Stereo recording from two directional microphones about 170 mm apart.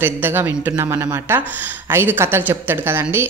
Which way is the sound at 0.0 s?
10° right (ahead or behind).